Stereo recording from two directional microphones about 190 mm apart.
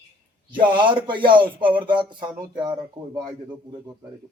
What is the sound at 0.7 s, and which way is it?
Speech, 25° right (ahead or behind).